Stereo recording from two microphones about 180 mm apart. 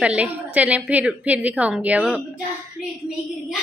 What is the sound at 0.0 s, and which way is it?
A woman's voice, 5° right (ahead or behind).